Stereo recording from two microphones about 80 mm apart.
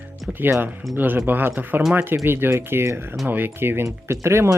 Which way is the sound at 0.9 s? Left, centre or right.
Right.